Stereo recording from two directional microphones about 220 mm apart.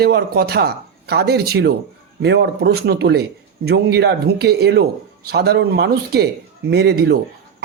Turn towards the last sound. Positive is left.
turn(degrees=-45)  # may be behind; listen again after turning